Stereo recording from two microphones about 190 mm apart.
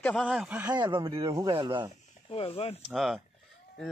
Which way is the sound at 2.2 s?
30° left (ahead or behind).